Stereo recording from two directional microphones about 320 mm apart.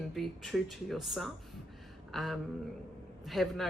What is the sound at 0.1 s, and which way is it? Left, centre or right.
Speech, centre.